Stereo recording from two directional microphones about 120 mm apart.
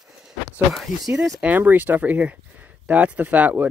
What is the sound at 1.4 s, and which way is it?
Speech, 15° right (ahead or behind).